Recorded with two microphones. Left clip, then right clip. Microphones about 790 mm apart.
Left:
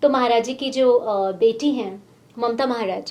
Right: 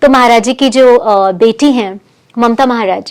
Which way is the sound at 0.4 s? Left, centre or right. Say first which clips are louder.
Right 12 dB; right.